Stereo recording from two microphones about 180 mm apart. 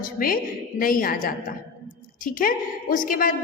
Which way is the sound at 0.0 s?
55° left (ahead or behind).